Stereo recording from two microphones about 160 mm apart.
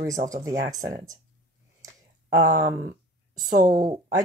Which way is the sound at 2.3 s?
50° right (ahead or behind).